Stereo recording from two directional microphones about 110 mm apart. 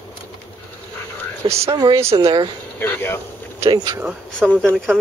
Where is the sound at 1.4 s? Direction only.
40° right (ahead or behind).